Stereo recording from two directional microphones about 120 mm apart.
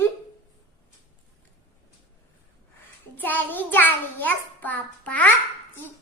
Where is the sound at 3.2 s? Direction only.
15° left (ahead or behind).